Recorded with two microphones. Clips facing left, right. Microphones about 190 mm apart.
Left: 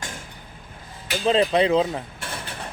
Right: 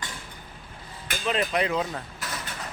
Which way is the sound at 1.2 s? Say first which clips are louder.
Left 7 dB; 30° left (ahead or behind).